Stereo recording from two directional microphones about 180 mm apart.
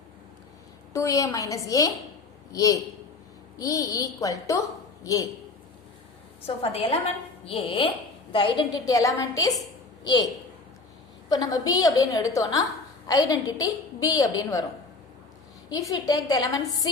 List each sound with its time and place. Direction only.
0.9 s a woman's voice: 20° left (ahead or behind)
6.4 s a woman's voice: 35° left (ahead or behind)
11.3 s a woman's voice: 20° left (ahead or behind)
15.7 s a woman's voice: 20° left (ahead or behind)